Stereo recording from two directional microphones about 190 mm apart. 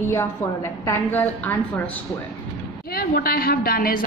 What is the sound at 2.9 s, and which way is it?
A woman's voice, 55° left (ahead or behind).